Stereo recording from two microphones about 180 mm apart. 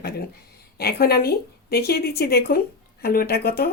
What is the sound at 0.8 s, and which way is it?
Speech, 60° left (ahead or behind).